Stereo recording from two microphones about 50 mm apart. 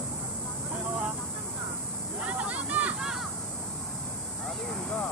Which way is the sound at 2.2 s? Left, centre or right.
Right.